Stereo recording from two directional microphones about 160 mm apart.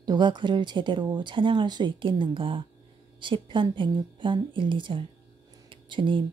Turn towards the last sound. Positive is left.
turn(degrees=-30)  # may be behind; listen again after turning